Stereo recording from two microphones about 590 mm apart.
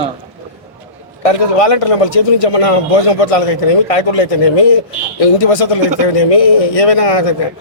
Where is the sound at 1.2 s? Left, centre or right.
Left.